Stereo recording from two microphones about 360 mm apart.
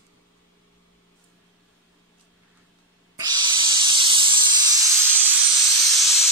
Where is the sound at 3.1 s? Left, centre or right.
Centre.